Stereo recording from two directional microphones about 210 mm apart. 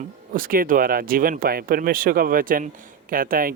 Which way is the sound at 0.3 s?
45° right (ahead or behind).